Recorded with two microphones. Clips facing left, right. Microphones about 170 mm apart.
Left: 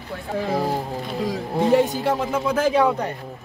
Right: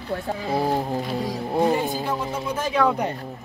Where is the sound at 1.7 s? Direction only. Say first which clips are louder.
Left 6 dB; 80° left.